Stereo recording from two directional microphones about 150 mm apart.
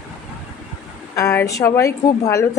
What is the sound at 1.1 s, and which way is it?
A woman's voice, 20° left (ahead or behind).